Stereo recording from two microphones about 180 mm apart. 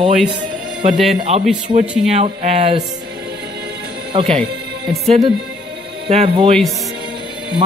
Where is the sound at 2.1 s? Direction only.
35° right (ahead or behind).